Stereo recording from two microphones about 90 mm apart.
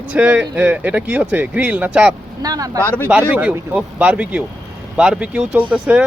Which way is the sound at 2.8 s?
20° left (ahead or behind).